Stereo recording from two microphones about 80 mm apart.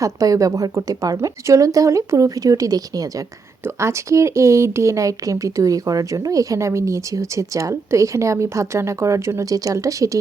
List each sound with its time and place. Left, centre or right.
0.0 s a woman's voice: right
3.6 s speech: right